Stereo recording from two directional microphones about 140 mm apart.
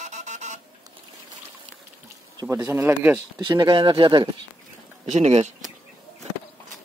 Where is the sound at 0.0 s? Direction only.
60° right (ahead or behind).